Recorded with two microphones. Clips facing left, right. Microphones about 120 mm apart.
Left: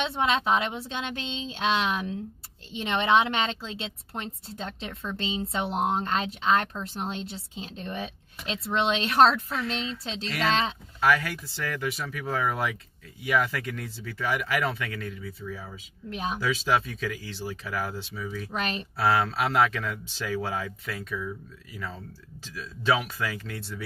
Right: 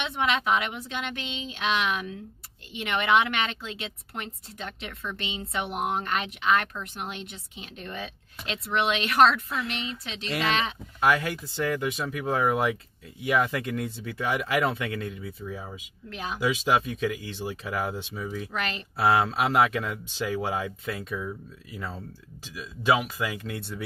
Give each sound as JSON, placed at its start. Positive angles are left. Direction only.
{"t": 0.0, "sound": "a woman's voice", "side_deg": 30}
{"t": 11.0, "sound": "speech", "side_deg": -20}
{"t": 16.1, "sound": "a woman's voice", "side_deg": 25}
{"t": 16.3, "sound": "speech", "side_deg": -15}
{"t": 18.5, "sound": "a woman's voice", "side_deg": 25}
{"t": 18.9, "sound": "speech", "side_deg": -20}
{"t": 22.4, "sound": "speech", "side_deg": -15}